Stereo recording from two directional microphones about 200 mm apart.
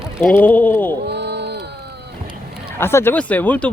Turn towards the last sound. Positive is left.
turn(degrees=10)  # may be behind; listen again after turning